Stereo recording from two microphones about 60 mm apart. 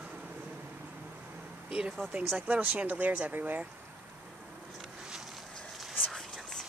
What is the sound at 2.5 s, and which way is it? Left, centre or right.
Speech, right.